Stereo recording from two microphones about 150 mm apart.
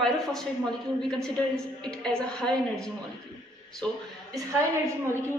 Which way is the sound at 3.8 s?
10° left (ahead or behind).